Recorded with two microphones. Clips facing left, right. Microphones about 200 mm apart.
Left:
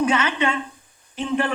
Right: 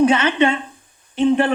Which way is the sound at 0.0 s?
30° right (ahead or behind).